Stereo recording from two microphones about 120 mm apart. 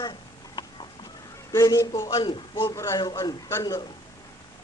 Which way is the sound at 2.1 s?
45° left (ahead or behind).